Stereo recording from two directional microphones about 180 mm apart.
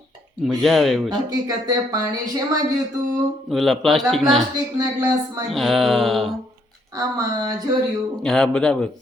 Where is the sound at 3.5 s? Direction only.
Centre (ahead or behind).